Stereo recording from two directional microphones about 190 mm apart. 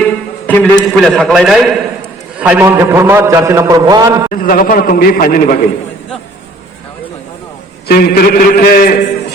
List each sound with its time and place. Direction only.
0.0 s a sound: 5° left (ahead or behind)
0.9 s a man's voice: 5° left (ahead or behind); by 4.3 s 15° right (ahead or behind)
4.3 s a man's voice: 45° left (ahead or behind)
7.9 s a man's voice: 55° left (ahead or behind)